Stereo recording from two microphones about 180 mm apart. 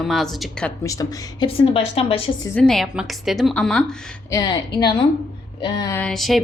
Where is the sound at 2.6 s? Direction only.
5° left (ahead or behind).